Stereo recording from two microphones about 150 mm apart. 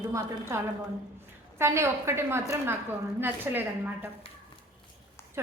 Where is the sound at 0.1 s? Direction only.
15° right (ahead or behind).